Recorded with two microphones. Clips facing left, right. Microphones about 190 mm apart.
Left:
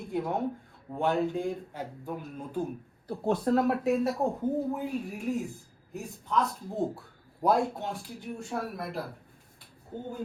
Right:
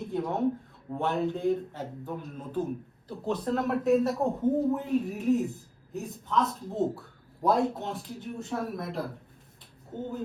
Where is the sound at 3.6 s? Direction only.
Centre (ahead or behind).